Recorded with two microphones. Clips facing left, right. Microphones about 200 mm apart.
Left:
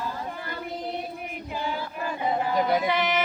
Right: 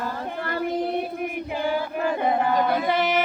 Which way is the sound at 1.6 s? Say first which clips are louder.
Right 7 dB; 55° right (ahead or behind).